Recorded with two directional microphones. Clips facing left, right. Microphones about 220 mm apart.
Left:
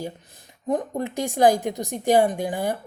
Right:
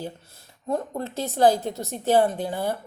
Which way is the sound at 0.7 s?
15° left (ahead or behind).